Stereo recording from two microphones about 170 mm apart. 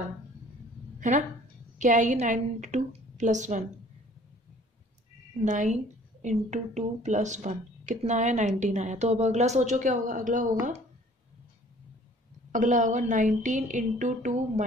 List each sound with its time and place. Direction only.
0.9 s a sound: 45° right (ahead or behind)
1.8 s a woman's voice: 45° right (ahead or behind)
5.4 s a woman's voice: 45° right (ahead or behind)
12.5 s a woman's voice: 45° right (ahead or behind)